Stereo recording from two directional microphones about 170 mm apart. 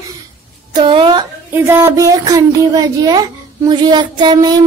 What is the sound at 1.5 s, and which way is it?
Speech, 15° right (ahead or behind).